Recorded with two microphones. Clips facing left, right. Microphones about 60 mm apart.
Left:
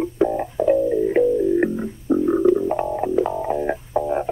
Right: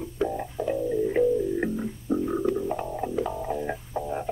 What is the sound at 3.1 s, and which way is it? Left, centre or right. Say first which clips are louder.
Music: left 7 dB; left.